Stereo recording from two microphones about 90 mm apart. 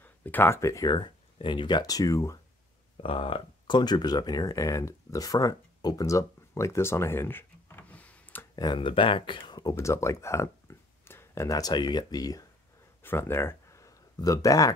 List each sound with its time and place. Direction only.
0.0 s a sound: 20° left (ahead or behind)
0.6 s speech: 35° left (ahead or behind)
0.8 s speech: 55° left (ahead or behind); by 2.3 s 40° left (ahead or behind)
3.0 s speech: 85° left; by 8.5 s 20° left (ahead or behind)
8.7 s speech: 70° left (ahead or behind)
9.6 s a sound: 35° left (ahead or behind)
11.4 s speech: 40° left (ahead or behind)
11.7 s speech: 55° left (ahead or behind)
13.0 s a sound: 25° left (ahead or behind)